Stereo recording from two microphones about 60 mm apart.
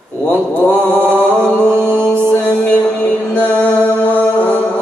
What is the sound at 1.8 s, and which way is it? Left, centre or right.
Mantra, centre.